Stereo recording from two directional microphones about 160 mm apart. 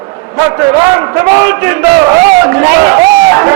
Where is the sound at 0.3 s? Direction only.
15° right (ahead or behind).